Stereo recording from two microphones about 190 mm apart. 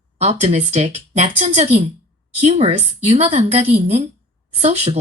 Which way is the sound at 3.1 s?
30° right (ahead or behind).